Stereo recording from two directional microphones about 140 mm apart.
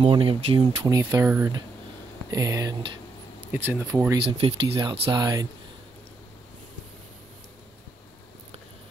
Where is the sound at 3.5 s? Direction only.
15° right (ahead or behind).